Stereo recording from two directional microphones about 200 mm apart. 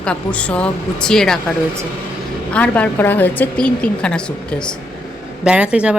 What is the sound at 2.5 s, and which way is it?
Speech, 5° left (ahead or behind).